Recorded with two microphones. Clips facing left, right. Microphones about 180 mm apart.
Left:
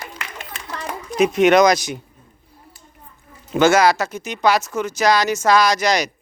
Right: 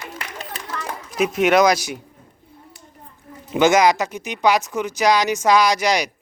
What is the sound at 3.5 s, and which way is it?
Speech, 15° right (ahead or behind).